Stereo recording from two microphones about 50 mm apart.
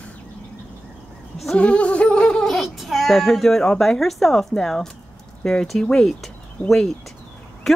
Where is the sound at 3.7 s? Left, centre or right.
Centre.